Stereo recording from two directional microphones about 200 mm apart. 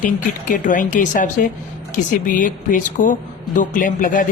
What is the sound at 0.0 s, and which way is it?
Speech, 40° left (ahead or behind).